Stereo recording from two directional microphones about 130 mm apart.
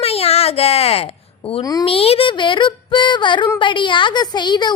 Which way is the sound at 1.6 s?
30° left (ahead or behind).